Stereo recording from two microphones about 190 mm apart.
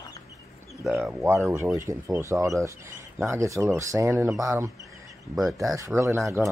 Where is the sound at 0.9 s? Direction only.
10° right (ahead or behind).